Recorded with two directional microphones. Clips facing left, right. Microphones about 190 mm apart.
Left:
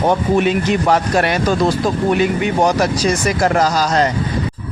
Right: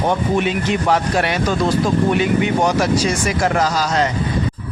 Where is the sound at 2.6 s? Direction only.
40° left (ahead or behind).